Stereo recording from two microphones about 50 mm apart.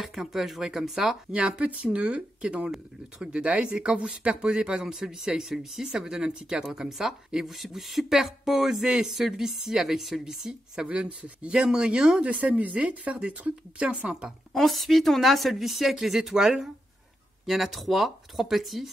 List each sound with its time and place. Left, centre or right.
0.0 s a woman's voice: centre
1.3 s a woman's voice: right
10.9 s speech: right
12.3 s speech: right
14.5 s a woman's voice: centre